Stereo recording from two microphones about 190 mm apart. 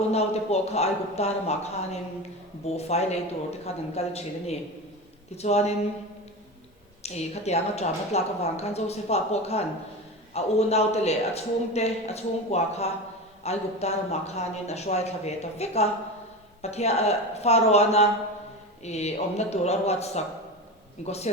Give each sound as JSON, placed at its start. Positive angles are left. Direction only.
{"t": 0.1, "sound": "a woman's voice", "side_deg": 35}
{"t": 7.0, "sound": "a woman's voice", "side_deg": 35}